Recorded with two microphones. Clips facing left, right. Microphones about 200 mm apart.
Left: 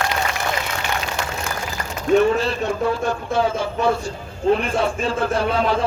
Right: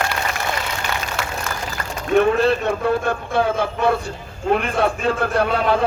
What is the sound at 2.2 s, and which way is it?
A man's voice, 55° right (ahead or behind).